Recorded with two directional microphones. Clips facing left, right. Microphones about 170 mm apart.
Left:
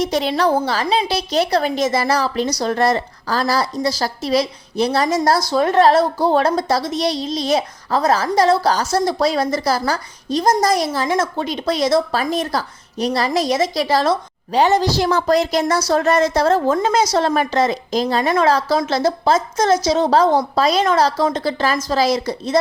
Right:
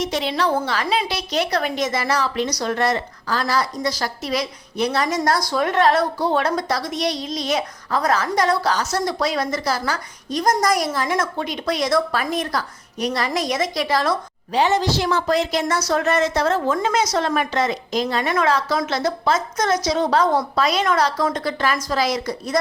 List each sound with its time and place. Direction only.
0.0 s a woman's voice: 40° left (ahead or behind)
14.5 s a woman's voice: 40° left (ahead or behind)